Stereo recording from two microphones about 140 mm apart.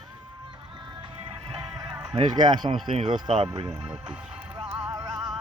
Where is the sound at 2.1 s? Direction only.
35° right (ahead or behind).